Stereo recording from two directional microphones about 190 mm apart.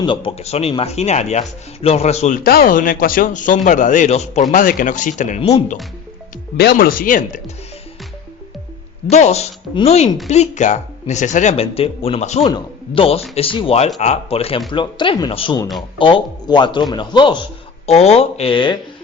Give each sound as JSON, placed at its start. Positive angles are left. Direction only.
{"t": 0.0, "sound": "speech", "side_deg": 25}
{"t": 6.6, "sound": "speech", "side_deg": 55}
{"t": 9.0, "sound": "speech", "side_deg": 35}